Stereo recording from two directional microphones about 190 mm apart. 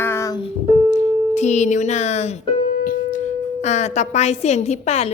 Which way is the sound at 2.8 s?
45° left (ahead or behind).